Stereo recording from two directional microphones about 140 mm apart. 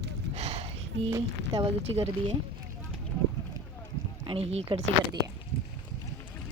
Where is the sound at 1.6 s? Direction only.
40° right (ahead or behind).